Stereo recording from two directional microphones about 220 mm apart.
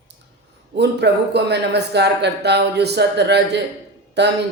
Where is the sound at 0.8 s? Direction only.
50° right (ahead or behind).